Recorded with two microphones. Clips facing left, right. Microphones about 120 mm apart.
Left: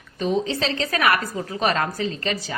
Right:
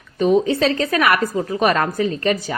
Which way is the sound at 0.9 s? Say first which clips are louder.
Right 4 dB; 30° right (ahead or behind).